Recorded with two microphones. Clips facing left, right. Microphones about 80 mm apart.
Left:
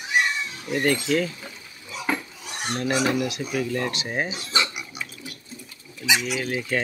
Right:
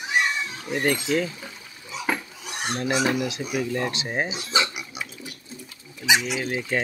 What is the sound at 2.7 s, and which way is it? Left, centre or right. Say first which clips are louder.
Speech: even; centre.